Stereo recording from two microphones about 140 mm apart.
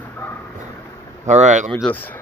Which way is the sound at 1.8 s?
10° left (ahead or behind).